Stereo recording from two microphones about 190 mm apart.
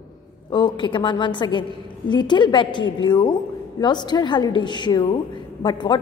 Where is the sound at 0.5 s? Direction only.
25° left (ahead or behind).